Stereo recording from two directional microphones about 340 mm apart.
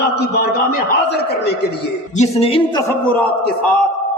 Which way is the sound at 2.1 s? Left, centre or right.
Centre.